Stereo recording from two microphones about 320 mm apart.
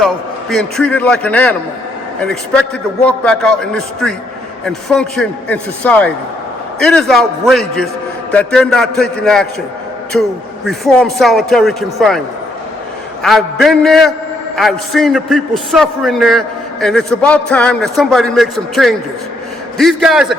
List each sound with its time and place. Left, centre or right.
0.5 s a man's voice: centre
13.2 s a man's voice: centre